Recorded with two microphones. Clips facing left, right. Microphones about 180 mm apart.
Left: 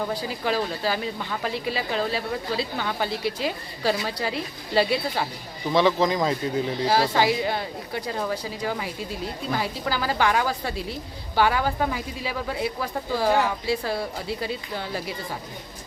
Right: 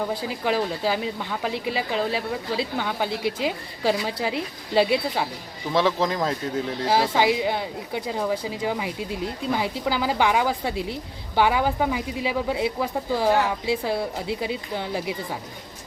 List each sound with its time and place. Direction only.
0.1 s a woman's voice: 20° right (ahead or behind)
5.7 s speech: centre (ahead or behind)
7.2 s a woman's voice: 15° right (ahead or behind)